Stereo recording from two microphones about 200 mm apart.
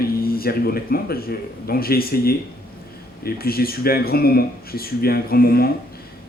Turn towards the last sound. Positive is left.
turn(degrees=50)  # may be behind; listen again after turning